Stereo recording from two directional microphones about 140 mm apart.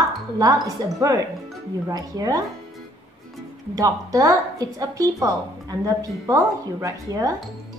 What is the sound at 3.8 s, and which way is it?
A woman's voice, 25° right (ahead or behind).